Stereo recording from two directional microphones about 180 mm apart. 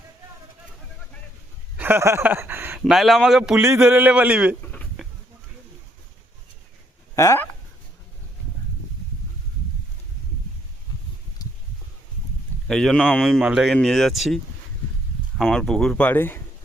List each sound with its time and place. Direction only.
1.7 s speech: 10° right (ahead or behind)
2.8 s a man's voice: centre (ahead or behind)
4.6 s a sound: 5° left (ahead or behind)
7.2 s speech: 15° left (ahead or behind)
11.4 s a sound: 20° left (ahead or behind)
12.6 s a man's voice: 5° left (ahead or behind)